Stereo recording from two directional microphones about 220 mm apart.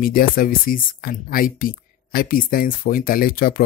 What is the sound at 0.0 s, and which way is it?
Speech, 40° left (ahead or behind).